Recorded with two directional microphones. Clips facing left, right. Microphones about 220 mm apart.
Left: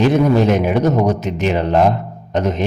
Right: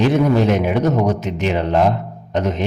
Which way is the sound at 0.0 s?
45° left (ahead or behind).